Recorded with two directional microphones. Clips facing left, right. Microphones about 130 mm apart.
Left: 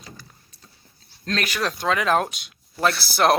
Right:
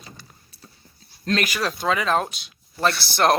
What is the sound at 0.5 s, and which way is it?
Dog, 10° right (ahead or behind).